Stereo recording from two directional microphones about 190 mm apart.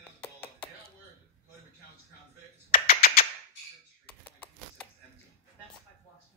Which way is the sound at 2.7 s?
50° left (ahead or behind).